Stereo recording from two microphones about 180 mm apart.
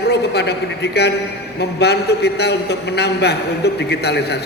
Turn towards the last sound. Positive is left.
turn(degrees=65)  # may be behind; listen again after turning